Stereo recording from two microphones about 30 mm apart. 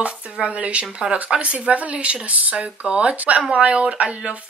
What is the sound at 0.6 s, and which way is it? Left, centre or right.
Speech, right.